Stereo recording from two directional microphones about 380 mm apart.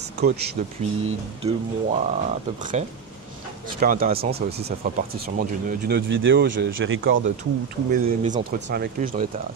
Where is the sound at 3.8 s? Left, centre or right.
Right.